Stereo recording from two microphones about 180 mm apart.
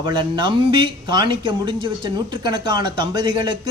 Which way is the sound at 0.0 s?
25° right (ahead or behind).